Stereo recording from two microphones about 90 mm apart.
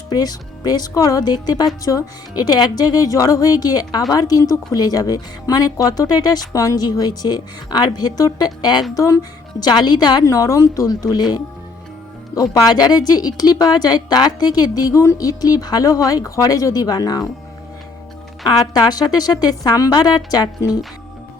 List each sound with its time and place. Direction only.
0.1 s speech: 45° left (ahead or behind)
9.0 s a woman's voice: 35° left (ahead or behind)
9.6 s speech: 50° left (ahead or behind)
10.2 s a woman's voice: 35° left (ahead or behind)
18.4 s speech: 50° left (ahead or behind)